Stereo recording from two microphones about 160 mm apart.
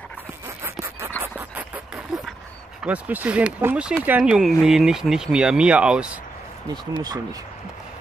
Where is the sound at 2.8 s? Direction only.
10° right (ahead or behind).